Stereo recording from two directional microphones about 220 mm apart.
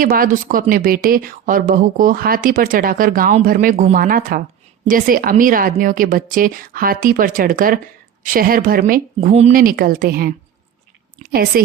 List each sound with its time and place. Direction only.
0.0 s a woman's voice: 40° right (ahead or behind)